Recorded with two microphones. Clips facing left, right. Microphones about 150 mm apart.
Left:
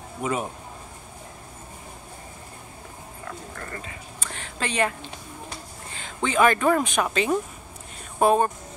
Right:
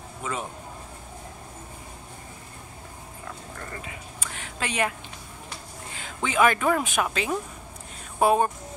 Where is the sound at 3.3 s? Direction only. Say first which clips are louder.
Left 2 dB; 10° right (ahead or behind).